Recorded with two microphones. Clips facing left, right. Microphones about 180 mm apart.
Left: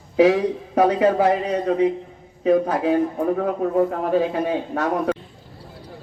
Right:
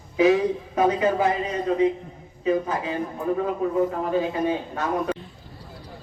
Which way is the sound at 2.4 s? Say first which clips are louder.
Left 6 dB; 60° left (ahead or behind).